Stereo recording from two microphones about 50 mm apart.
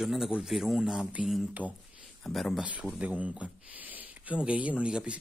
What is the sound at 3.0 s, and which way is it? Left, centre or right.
Speech, right.